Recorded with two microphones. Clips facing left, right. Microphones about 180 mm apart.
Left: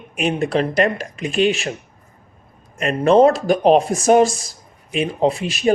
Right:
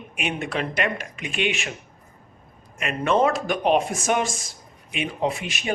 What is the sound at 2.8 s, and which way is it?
Speech, 35° left (ahead or behind).